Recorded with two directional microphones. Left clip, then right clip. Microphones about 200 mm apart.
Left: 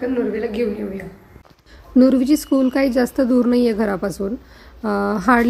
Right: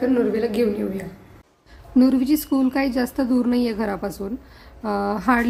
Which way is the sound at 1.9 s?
15° left (ahead or behind).